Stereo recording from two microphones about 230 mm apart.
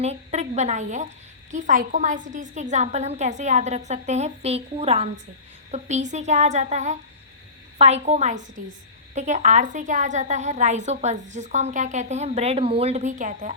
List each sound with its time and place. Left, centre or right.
0.0 s a woman's voice: right